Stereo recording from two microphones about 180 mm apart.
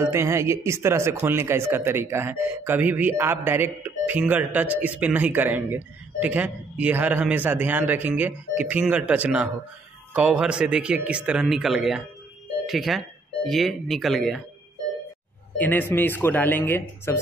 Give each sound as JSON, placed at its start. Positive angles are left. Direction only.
{"t": 0.0, "sound": "speech", "side_deg": -15}
{"t": 15.5, "sound": "speech", "side_deg": 10}